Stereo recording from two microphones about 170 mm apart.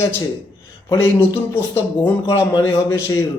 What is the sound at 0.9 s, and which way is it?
Speech, 15° left (ahead or behind).